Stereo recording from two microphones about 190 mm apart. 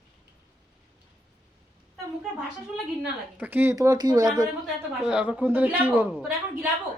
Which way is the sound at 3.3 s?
10° right (ahead or behind).